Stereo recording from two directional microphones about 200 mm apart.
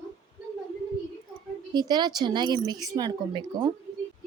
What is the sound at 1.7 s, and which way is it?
A woman's voice, 20° right (ahead or behind).